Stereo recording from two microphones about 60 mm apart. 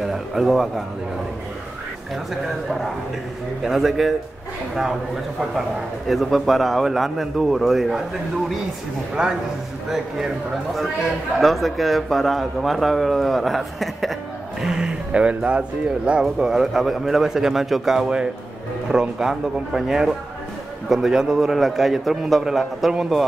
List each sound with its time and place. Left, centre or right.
0.0 s a man's voice: centre
3.6 s a man's voice: centre
6.0 s a man's voice: centre
9.2 s a man's voice: centre
14.6 s a man's voice: centre